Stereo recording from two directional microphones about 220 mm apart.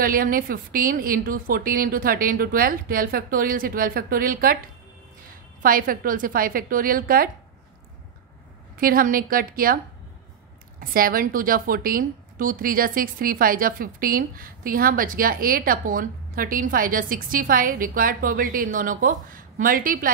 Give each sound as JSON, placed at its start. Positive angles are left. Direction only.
{"t": 0.0, "sound": "a woman's voice", "side_deg": -40}
{"t": 5.6, "sound": "a woman's voice", "side_deg": -40}
{"t": 8.7, "sound": "a woman's voice", "side_deg": -40}
{"t": 10.8, "sound": "a woman's voice", "side_deg": -40}